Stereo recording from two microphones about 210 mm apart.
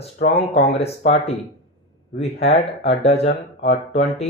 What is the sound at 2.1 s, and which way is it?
Speech, 30° left (ahead or behind).